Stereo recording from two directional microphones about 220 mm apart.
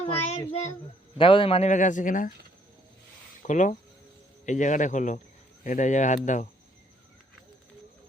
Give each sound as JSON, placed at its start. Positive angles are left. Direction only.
{"t": 0.0, "sound": "child singing", "side_deg": 25}
{"t": 1.2, "sound": "a man's voice", "side_deg": 25}
{"t": 3.4, "sound": "a man's voice", "side_deg": 35}